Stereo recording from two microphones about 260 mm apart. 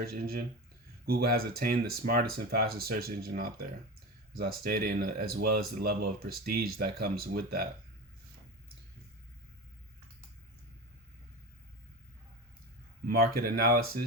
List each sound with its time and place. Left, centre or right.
0.0 s speech: right
13.1 s speech: right